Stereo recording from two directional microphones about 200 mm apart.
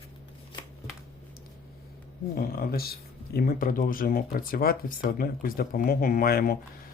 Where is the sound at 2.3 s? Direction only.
45° left (ahead or behind).